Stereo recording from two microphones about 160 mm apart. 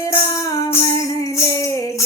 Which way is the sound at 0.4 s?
20° left (ahead or behind).